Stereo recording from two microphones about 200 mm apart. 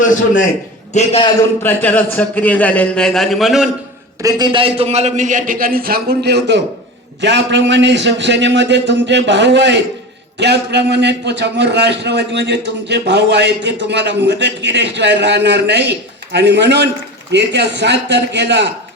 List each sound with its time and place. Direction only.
0.9 s a man's voice: 30° left (ahead or behind)
1.6 s a man's voice: 10° left (ahead or behind)
4.2 s a man's voice: 20° right (ahead or behind); by 18.7 s 60° right (ahead or behind)